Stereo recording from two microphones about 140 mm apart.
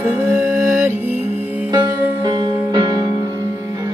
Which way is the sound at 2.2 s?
30° right (ahead or behind).